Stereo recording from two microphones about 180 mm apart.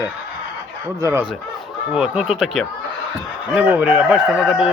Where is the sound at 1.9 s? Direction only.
5° right (ahead or behind).